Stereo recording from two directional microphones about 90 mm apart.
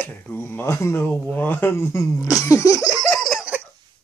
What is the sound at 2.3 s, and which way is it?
Laughter, 35° left (ahead or behind).